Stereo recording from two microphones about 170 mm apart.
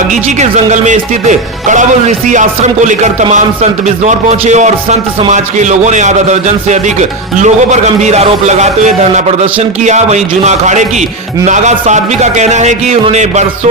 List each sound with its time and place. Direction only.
0.1 s speech: 45° right (ahead or behind)